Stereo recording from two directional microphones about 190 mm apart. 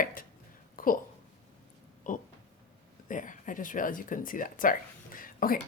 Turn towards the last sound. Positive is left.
turn(degrees=50)  # may be behind; listen again after turning